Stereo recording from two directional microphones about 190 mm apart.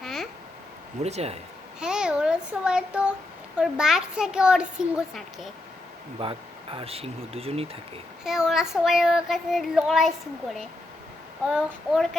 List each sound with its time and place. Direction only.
0.0 s a sound: centre (ahead or behind)
1.0 s speech: 35° right (ahead or behind)
1.8 s a child's voice: 5° right (ahead or behind)
6.1 s speech: 30° right (ahead or behind)
8.2 s a child's voice: centre (ahead or behind)
11.4 s a child's voice: centre (ahead or behind)